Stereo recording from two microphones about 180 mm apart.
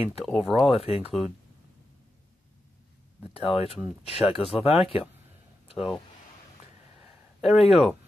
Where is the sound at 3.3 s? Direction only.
30° left (ahead or behind).